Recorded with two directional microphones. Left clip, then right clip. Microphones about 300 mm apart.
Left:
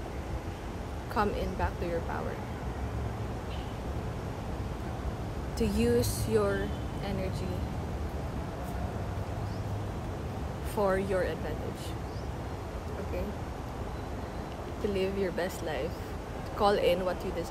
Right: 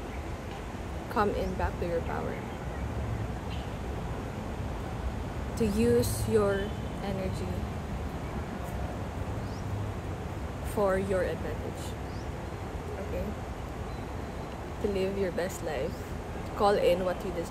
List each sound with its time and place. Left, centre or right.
1.1 s speech: centre
5.6 s speech: centre
10.8 s speech: centre
15.0 s speech: centre